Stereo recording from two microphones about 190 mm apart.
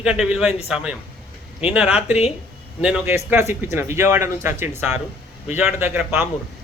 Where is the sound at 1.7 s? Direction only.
5° right (ahead or behind).